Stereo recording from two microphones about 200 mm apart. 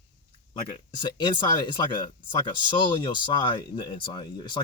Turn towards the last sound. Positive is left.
turn(degrees=25)  # may be behind; listen again after turning